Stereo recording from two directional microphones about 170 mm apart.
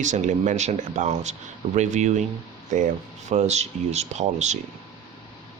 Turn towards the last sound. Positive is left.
turn(degrees=-45)  # may be behind; listen again after turning